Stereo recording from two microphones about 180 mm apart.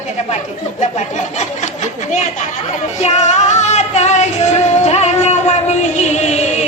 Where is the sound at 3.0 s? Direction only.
40° left (ahead or behind).